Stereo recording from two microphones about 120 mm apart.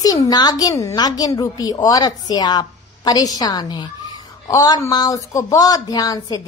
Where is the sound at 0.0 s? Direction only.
30° left (ahead or behind).